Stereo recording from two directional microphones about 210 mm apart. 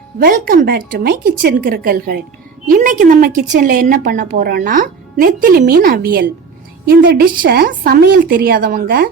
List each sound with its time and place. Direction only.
0.2 s a woman's voice: 40° right (ahead or behind)